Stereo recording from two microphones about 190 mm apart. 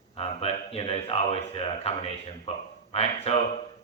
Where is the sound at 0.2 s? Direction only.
30° left (ahead or behind).